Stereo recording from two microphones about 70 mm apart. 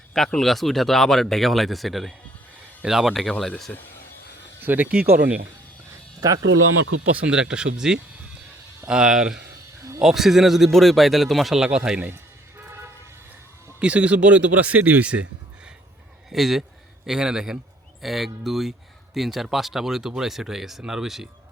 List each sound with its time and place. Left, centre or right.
0.1 s speech: centre
4.6 s speech: right
6.1 s speech: right
7.1 s speech: centre
12.1 s music: right
13.7 s speech: centre
16.3 s speech: centre